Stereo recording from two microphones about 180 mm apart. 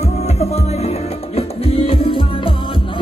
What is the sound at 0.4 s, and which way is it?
Music, 35° left (ahead or behind).